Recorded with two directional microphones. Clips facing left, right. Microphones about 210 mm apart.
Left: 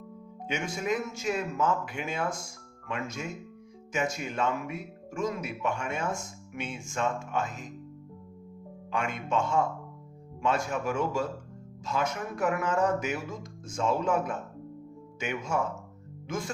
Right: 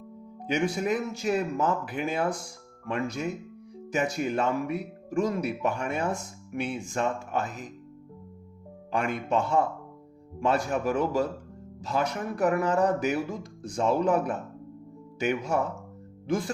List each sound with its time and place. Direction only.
0.4 s speech: 35° right (ahead or behind)
8.9 s speech: 35° right (ahead or behind)